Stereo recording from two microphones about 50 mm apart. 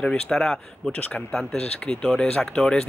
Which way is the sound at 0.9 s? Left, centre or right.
Left.